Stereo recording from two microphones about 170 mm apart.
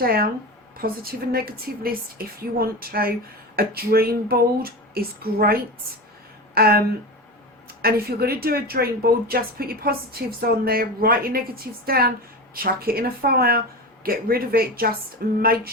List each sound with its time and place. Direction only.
0.0 s speech: 60° right (ahead or behind)